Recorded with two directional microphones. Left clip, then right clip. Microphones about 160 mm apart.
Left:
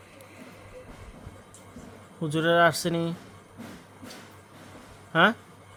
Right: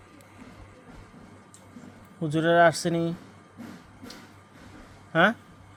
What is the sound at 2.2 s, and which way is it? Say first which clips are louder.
Speech: right 1 dB; centre (ahead or behind).